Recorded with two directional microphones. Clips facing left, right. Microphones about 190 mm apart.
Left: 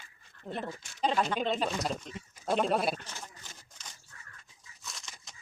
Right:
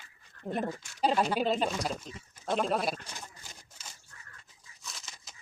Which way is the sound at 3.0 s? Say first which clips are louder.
Even; 15° right (ahead or behind).